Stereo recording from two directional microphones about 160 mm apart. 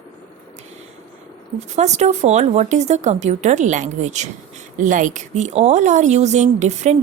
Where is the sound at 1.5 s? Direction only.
45° right (ahead or behind).